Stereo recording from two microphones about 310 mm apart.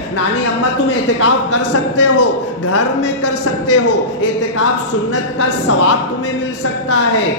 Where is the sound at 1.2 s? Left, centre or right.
Left.